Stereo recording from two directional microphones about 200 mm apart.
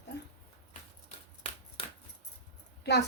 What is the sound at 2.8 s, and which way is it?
Speech, 55° left (ahead or behind).